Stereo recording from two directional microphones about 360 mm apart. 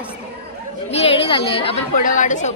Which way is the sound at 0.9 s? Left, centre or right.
Centre.